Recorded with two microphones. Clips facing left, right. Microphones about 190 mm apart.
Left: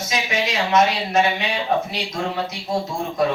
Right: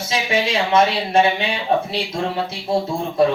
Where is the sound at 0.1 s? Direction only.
30° right (ahead or behind).